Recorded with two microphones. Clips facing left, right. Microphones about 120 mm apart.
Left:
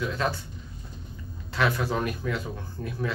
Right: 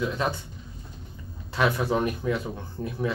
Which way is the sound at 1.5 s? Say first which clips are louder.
Right 2 dB; 20° right (ahead or behind).